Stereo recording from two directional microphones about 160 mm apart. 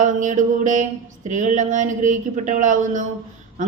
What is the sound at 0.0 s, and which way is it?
Speech, 50° right (ahead or behind).